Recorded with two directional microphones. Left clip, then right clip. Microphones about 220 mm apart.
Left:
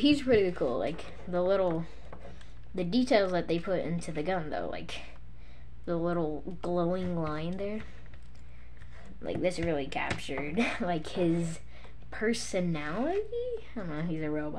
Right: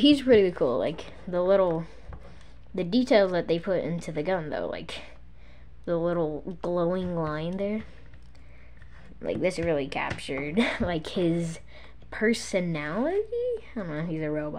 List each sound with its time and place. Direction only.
0.0 s speech: 35° right (ahead or behind)
9.2 s speech: 35° right (ahead or behind)